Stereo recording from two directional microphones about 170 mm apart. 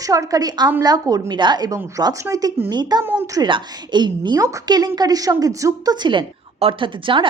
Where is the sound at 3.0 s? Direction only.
15° right (ahead or behind).